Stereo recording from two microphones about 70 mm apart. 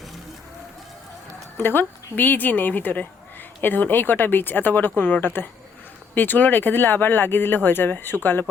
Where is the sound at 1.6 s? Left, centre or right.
Left.